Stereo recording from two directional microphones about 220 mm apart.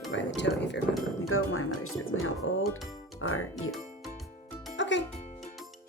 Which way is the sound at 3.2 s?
70° left (ahead or behind).